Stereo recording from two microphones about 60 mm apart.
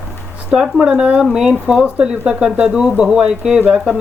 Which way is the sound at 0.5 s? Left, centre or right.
Centre.